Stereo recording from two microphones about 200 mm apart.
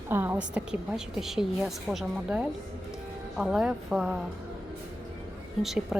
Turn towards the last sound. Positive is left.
turn(degrees=0)  # may be behind; listen again after turning